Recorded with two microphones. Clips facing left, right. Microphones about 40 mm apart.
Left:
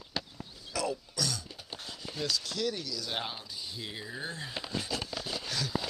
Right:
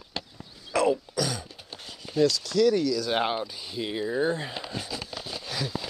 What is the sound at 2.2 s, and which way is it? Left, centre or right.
Speech, right.